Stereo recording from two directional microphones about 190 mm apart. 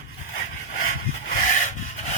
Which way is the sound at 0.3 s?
45° left (ahead or behind).